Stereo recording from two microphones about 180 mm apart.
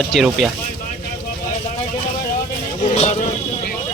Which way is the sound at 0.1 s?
Centre (ahead or behind).